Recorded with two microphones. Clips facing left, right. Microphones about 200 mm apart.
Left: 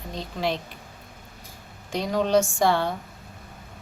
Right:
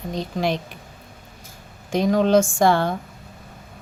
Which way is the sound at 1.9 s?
50° right (ahead or behind).